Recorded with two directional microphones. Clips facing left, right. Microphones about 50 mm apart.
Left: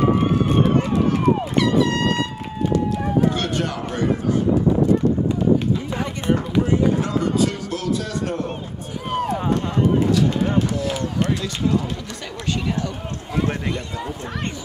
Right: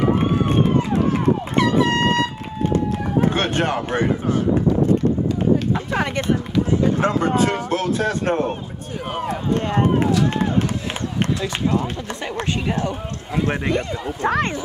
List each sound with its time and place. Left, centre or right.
1.6 s a sound: right
2.7 s run: right
6.2 s speech: left
7.0 s speech: right
11.4 s speech: right
13.7 s speech: right